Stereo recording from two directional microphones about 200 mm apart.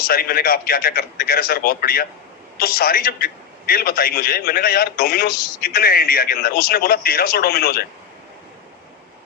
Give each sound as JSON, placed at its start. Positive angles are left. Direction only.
{"t": 0.0, "sound": "a man's voice", "side_deg": 50}